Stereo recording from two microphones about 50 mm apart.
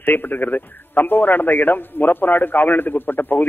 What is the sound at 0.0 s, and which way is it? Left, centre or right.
A man's voice, left.